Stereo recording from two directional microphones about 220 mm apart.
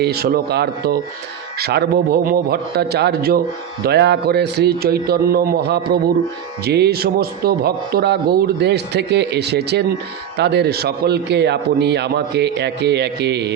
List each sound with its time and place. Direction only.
0.0 s a man's voice: 45° right (ahead or behind)